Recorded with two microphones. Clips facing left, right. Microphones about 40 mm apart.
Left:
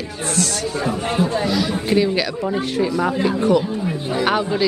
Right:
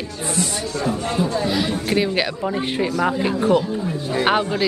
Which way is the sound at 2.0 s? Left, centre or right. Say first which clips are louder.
Left 2 dB; centre.